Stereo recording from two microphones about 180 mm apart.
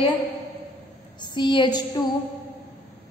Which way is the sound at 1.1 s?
25° left (ahead or behind).